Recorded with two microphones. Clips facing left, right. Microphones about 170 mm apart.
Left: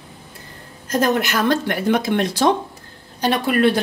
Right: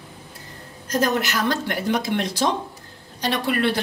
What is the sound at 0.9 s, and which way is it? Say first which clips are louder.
Speech: left 3 dB; 55° left (ahead or behind).